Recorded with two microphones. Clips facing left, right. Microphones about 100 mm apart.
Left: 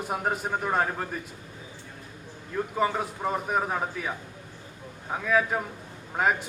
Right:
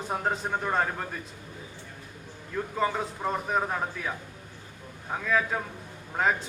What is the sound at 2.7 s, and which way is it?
A man's voice, 5° left (ahead or behind).